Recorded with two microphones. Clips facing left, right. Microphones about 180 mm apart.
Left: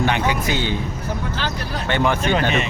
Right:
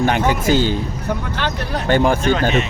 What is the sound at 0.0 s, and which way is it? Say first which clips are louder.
Speech: right 3 dB; 45° right (ahead or behind).